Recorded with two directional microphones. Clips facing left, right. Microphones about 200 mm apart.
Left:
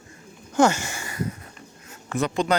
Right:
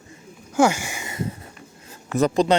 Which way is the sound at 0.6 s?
10° right (ahead or behind).